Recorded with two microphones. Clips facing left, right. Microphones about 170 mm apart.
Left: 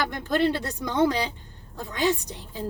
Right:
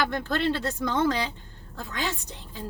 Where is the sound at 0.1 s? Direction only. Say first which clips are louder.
Left 3 dB; 15° left (ahead or behind).